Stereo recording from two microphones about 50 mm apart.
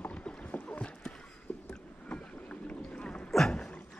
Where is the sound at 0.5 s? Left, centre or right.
Left.